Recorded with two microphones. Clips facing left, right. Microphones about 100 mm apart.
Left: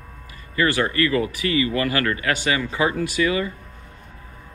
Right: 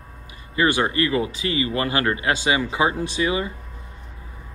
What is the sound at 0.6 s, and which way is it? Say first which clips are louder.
Speech: even; 20° right (ahead or behind).